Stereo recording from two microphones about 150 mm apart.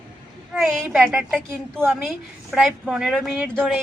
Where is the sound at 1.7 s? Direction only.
15° right (ahead or behind).